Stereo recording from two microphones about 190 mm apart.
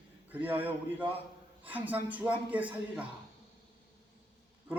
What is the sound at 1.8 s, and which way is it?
A man's voice, 10° right (ahead or behind).